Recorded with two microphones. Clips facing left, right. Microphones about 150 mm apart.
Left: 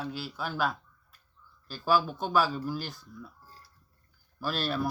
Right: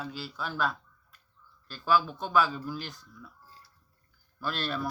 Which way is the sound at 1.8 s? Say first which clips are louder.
Even; 40° left (ahead or behind).